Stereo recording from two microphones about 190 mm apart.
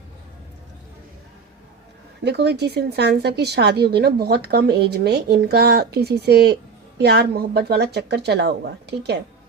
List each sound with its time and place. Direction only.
2.2 s speech: 60° right (ahead or behind)